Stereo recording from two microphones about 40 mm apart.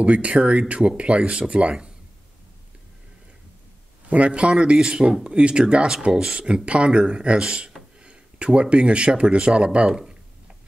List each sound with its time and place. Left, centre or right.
0.0 s speech: right
4.1 s speech: right